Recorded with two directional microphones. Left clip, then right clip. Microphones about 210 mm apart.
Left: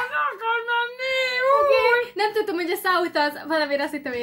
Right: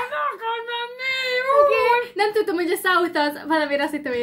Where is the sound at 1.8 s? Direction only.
10° right (ahead or behind).